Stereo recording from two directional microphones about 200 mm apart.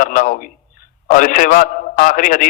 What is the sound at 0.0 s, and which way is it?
A man's voice, 40° left (ahead or behind).